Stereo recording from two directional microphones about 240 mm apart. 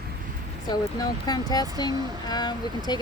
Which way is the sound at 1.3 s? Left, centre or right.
Centre.